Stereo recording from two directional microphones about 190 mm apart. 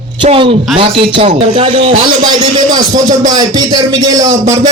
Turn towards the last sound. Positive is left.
turn(degrees=-20)  # may be behind; listen again after turning